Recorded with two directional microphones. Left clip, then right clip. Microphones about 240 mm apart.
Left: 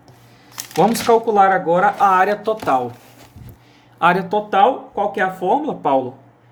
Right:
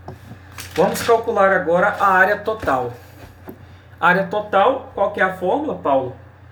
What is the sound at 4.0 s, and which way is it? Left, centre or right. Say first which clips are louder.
Speech: left 1 dB; left.